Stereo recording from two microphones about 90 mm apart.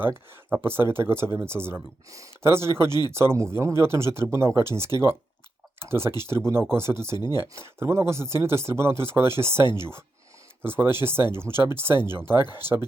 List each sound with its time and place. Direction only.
0.0 s speech: 25° right (ahead or behind)
5.9 s speech: 25° right (ahead or behind)